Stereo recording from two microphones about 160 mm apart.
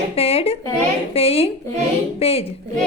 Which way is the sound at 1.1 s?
35° left (ahead or behind).